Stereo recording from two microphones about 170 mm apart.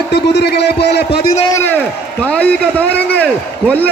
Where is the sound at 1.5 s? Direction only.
15° left (ahead or behind).